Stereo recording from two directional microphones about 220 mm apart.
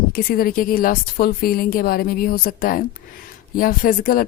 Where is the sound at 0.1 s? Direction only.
40° left (ahead or behind).